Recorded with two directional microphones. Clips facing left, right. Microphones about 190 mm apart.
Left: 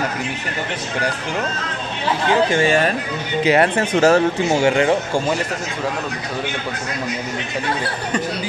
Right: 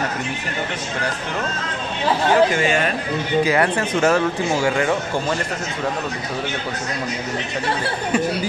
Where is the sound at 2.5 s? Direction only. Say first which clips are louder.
Left 3 dB; 35° left (ahead or behind).